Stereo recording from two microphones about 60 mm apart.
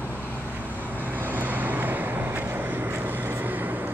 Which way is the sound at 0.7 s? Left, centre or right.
Right.